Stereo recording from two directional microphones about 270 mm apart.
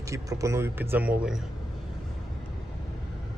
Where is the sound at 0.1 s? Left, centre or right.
Centre.